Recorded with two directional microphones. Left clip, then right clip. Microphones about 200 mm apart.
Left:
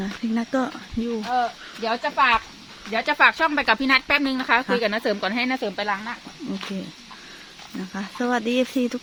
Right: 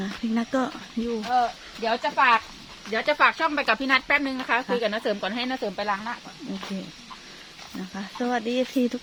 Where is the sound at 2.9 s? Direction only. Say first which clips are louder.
Left 3 dB; 55° left (ahead or behind); by 6.1 s 35° left (ahead or behind).